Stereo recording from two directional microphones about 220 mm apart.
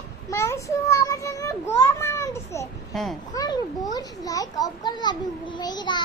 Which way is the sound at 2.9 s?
Centre (ahead or behind).